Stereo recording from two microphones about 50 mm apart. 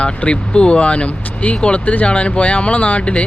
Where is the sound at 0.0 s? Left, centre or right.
Left.